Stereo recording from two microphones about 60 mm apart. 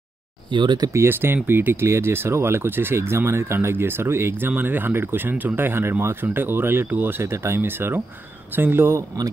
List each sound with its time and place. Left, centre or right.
0.9 s speech: right
5.3 s speech: right
5.6 s speech: right
7.2 s speech: right